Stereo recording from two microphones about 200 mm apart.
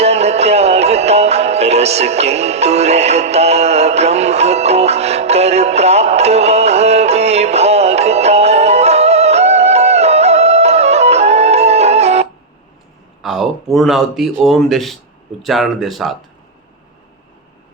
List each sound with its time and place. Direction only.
0.0 s music: 30° right (ahead or behind)
13.2 s a man's voice: centre (ahead or behind)